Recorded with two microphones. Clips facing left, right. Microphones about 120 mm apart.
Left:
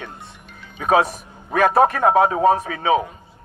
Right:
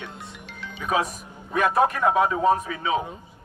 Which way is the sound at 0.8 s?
70° left (ahead or behind).